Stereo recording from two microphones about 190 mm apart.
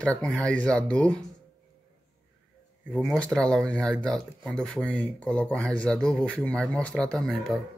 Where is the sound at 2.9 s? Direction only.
5° left (ahead or behind).